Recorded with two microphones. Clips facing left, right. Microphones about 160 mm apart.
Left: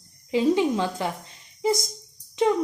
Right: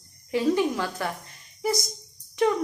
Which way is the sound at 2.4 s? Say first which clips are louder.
Left 1 dB; 20° left (ahead or behind).